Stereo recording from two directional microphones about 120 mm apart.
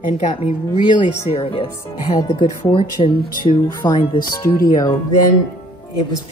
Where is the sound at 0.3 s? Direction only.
45° left (ahead or behind).